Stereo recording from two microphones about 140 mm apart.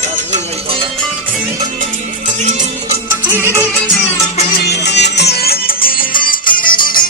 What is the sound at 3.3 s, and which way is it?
Music, 15° right (ahead or behind).